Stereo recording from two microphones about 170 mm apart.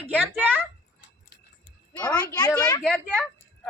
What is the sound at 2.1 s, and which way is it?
Speech, 20° left (ahead or behind).